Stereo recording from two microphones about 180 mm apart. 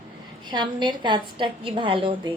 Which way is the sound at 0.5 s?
25° right (ahead or behind).